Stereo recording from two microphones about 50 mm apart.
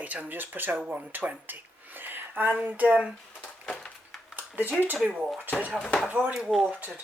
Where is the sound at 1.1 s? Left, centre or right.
Right.